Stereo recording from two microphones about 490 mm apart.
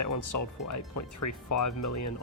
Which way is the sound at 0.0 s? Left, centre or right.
Left.